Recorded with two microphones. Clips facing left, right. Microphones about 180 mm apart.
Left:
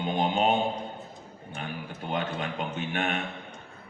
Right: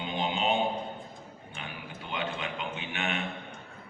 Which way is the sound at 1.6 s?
45° left (ahead or behind).